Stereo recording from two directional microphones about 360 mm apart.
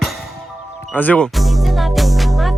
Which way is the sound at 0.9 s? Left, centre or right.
Centre.